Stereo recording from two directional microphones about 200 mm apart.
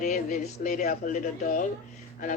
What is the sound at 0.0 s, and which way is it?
A woman's voice, 40° left (ahead or behind).